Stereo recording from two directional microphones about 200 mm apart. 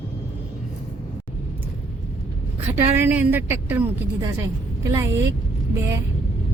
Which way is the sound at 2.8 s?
10° right (ahead or behind).